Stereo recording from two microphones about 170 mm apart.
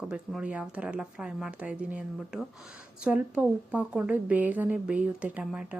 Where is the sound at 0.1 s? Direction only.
5° right (ahead or behind).